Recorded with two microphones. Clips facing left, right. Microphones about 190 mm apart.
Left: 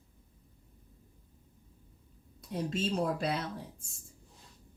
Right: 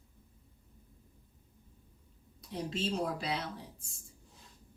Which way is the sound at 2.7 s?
50° left (ahead or behind).